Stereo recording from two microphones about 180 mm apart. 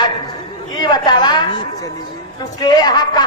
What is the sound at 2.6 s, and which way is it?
Speech, 20° left (ahead or behind).